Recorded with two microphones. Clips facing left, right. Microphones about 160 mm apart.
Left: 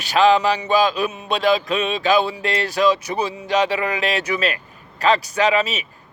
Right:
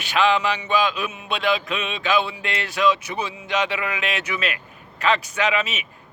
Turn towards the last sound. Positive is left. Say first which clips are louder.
# left 5 dB
turn(degrees=35)  # may be behind; listen again after turning